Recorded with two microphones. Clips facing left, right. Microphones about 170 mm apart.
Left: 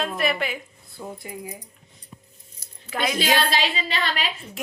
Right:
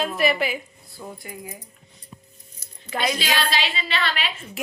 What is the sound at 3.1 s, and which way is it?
A woman's voice, 50° left (ahead or behind).